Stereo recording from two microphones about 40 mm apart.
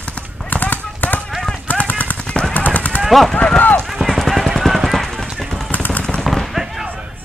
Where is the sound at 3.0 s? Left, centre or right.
Centre.